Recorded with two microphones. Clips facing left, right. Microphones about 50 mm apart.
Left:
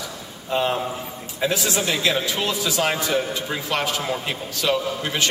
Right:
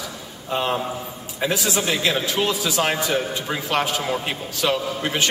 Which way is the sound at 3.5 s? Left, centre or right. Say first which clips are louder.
Right 4 dB; centre.